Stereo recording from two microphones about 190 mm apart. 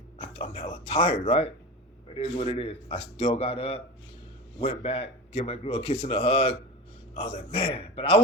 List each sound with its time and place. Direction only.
0.2 s speech: 30° left (ahead or behind)